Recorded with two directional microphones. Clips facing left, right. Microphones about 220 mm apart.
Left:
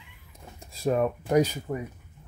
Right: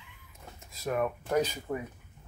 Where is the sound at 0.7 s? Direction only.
30° left (ahead or behind).